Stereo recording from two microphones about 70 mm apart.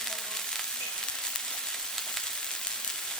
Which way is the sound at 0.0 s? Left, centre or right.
Centre.